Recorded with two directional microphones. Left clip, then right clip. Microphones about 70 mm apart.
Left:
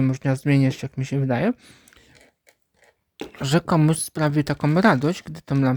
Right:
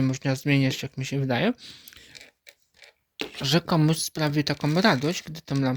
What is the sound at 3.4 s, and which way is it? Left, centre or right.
Speech, left.